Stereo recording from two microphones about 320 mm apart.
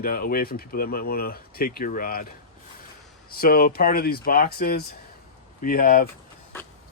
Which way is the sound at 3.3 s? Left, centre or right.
Left.